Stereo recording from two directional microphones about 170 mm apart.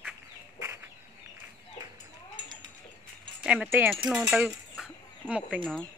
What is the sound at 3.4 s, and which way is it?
Speech, 5° right (ahead or behind).